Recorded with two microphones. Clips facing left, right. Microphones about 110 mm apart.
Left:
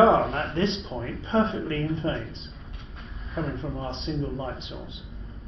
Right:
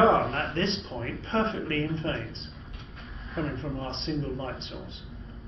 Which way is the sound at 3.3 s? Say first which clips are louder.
Left 1 dB; centre (ahead or behind).